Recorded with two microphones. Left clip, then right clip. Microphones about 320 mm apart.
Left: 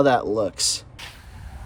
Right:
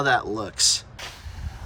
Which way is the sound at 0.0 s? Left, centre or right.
Centre.